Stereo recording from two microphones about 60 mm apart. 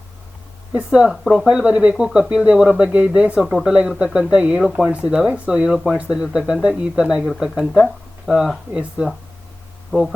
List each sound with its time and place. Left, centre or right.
0.9 s speech: centre
1.1 s speech: centre
1.5 s speech: centre
3.4 s speech: centre
3.7 s speech: centre
5.7 s speech: centre
6.0 s speech: centre
8.7 s speech: right
9.9 s speech: left